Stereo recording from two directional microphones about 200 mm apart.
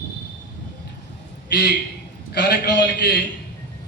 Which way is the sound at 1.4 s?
55° left (ahead or behind).